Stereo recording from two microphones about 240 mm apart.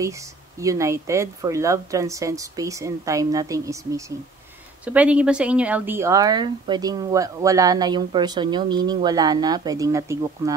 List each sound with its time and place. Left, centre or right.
0.6 s speech: centre